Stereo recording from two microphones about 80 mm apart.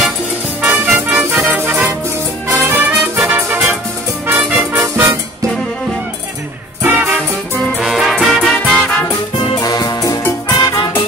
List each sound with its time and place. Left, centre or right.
0.6 s music: centre
3.4 s music: right
6.8 s music: right
7.8 s music: centre
9.6 s music: left
10.6 s music: left